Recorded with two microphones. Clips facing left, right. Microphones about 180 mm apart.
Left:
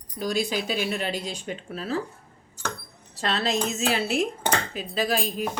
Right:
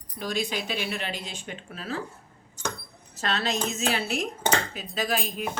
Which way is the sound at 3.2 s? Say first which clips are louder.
Left 2 dB; 30° left (ahead or behind).